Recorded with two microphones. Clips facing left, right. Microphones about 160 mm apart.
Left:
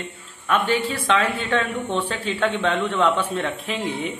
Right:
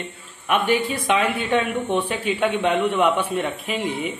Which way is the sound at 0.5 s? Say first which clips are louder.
Right 1 dB; 15° right (ahead or behind).